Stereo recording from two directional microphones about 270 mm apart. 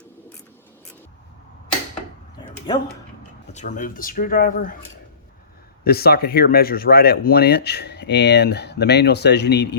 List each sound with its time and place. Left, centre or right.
2.7 s speech: centre
3.5 s speech: left
5.8 s speech: left